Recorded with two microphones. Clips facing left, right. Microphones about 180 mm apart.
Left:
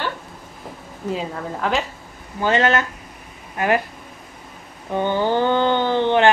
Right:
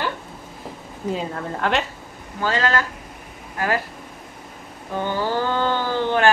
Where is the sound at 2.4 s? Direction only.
25° left (ahead or behind).